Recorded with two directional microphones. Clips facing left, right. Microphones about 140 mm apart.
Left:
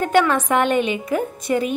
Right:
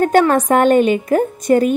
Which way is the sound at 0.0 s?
45° right (ahead or behind).